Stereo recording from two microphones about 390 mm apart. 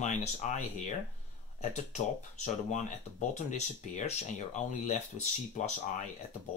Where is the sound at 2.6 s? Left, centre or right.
Centre.